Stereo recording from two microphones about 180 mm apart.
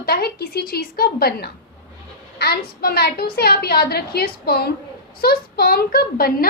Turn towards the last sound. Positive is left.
turn(degrees=55)  # may be behind; listen again after turning